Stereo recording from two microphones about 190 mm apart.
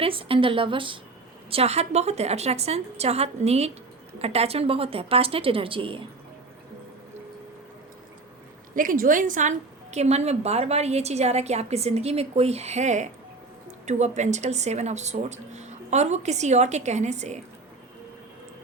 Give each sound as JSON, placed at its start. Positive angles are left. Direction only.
{"t": 0.0, "sound": "a woman's voice", "side_deg": -30}
{"t": 8.7, "sound": "a woman's voice", "side_deg": -45}